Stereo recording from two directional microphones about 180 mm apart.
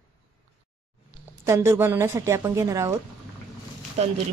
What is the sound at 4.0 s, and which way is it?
Speech, 35° right (ahead or behind).